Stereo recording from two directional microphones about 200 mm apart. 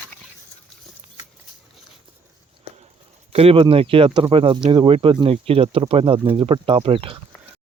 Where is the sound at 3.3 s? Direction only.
30° right (ahead or behind).